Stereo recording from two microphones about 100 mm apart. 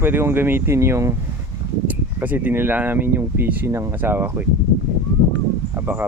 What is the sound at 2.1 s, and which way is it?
Speech, 20° right (ahead or behind).